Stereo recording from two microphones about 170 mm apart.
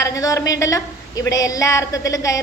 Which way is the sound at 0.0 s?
20° left (ahead or behind).